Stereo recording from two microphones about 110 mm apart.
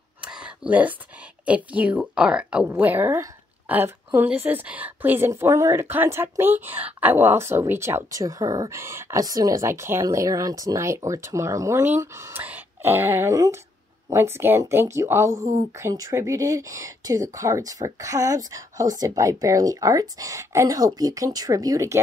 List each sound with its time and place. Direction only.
0.2 s a sound: 10° right (ahead or behind)
1.4 s a woman's voice: 10° right (ahead or behind)
2.7 s a woman's voice: 20° right (ahead or behind)
5.3 s speech: 30° right (ahead or behind)